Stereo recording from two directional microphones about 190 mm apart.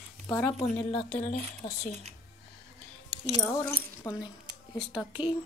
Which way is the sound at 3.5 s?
15° left (ahead or behind).